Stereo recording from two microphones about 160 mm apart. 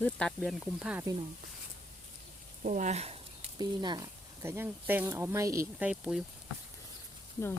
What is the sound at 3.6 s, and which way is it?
Speech, 25° right (ahead or behind).